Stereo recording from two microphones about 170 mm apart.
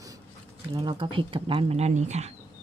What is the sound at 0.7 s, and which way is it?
Speech, 30° right (ahead or behind).